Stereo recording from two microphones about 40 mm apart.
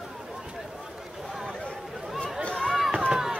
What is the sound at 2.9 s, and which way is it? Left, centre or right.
Run, centre.